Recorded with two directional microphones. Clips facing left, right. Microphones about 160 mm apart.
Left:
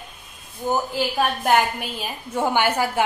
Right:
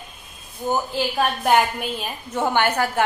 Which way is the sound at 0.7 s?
5° left (ahead or behind).